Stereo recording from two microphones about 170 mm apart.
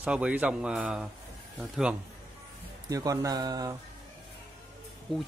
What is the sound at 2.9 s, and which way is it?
Speech, 20° right (ahead or behind).